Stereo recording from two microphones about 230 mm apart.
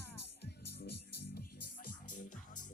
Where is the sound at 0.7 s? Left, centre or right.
Left.